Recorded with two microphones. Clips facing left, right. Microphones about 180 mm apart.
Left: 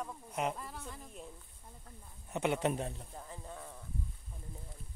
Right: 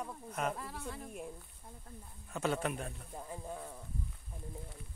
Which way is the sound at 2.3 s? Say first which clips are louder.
Left 2 dB; 20° left (ahead or behind).